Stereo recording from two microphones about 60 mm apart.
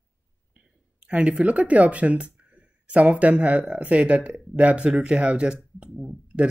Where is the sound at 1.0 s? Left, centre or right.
Centre.